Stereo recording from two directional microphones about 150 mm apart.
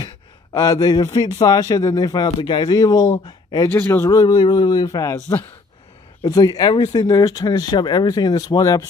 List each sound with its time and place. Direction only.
0.0 s speech: 25° left (ahead or behind)
3.7 s speech: 15° left (ahead or behind)
4.2 s speech: 30° left (ahead or behind)
6.2 s speech: 25° left (ahead or behind)